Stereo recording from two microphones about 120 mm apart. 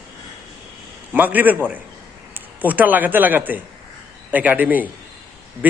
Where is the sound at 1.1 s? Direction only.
15° right (ahead or behind).